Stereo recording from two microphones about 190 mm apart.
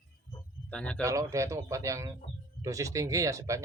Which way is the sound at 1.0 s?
15° right (ahead or behind).